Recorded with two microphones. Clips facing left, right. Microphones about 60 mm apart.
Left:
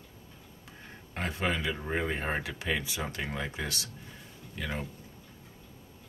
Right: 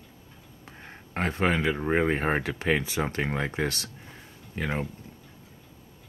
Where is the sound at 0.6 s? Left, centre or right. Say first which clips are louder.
Right 4 dB; right.